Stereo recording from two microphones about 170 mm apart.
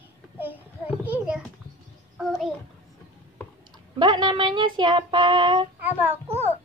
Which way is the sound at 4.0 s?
25° right (ahead or behind).